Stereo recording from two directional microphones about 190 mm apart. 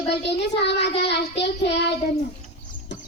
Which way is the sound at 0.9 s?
30° left (ahead or behind).